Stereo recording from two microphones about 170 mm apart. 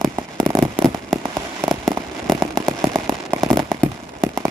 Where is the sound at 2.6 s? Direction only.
15° right (ahead or behind).